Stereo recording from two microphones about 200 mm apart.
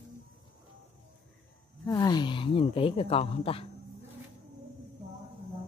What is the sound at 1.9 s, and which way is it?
Speech, 20° left (ahead or behind).